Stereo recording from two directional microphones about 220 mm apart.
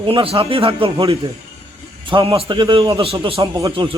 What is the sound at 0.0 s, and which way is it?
A man's voice, 25° right (ahead or behind).